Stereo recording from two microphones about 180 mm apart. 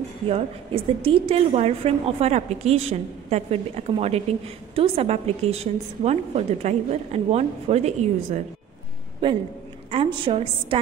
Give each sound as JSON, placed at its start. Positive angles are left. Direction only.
{"t": 0.3, "sound": "a woman's voice", "side_deg": -30}
{"t": 9.8, "sound": "a woman's voice", "side_deg": -30}